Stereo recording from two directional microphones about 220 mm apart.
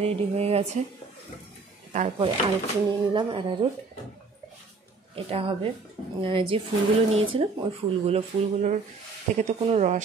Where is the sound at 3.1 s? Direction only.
20° right (ahead or behind).